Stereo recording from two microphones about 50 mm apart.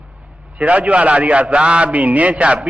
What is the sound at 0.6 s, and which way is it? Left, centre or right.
A man's voice, right.